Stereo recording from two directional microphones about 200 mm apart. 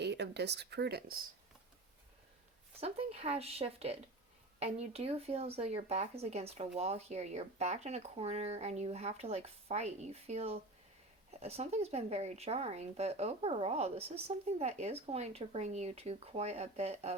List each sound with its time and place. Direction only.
0.0 s speech: 55° right (ahead or behind)
2.8 s speech: 30° right (ahead or behind)